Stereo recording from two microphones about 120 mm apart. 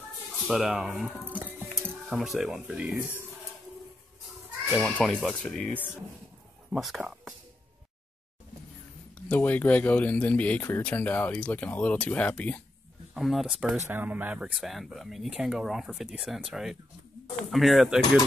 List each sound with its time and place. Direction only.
0.5 s speech: 5° right (ahead or behind)
1.0 s speech: 15° right (ahead or behind)
2.0 s speech: centre (ahead or behind)
4.7 s speech: 5° left (ahead or behind)
6.7 s speech: centre (ahead or behind)
9.3 s speech: 15° left (ahead or behind)
13.1 s speech: centre (ahead or behind)